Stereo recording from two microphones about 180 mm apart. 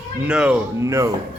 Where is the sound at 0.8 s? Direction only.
15° right (ahead or behind).